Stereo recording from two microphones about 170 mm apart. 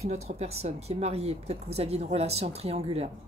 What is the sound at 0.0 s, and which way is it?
Speech, 40° right (ahead or behind).